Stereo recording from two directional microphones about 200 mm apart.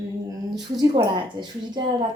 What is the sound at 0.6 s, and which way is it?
A woman's voice, 20° right (ahead or behind).